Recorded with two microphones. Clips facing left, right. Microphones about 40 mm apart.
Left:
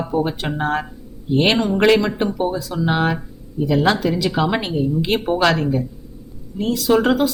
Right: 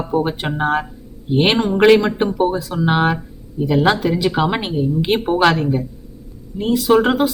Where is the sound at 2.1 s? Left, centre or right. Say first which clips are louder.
Right 3 dB; right.